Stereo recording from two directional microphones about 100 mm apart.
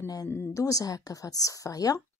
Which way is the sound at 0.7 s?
35° left (ahead or behind).